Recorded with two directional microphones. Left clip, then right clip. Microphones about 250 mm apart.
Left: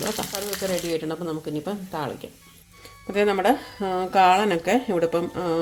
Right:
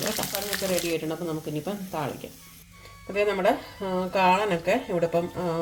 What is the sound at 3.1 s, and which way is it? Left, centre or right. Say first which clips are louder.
Speech: left 3 dB; left.